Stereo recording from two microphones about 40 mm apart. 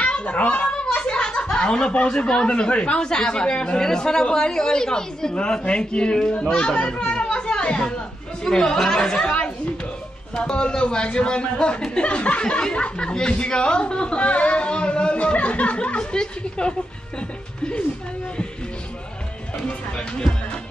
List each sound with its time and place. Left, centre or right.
0.0 s a child's voice: left
0.9 s snicker: left
2.4 s a man's voice: left
5.3 s a man's voice: left
6.5 s chatter: left
8.5 s speech: centre
10.3 s a man's voice: left